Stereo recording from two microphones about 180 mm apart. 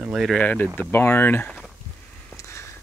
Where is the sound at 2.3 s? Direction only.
15° left (ahead or behind).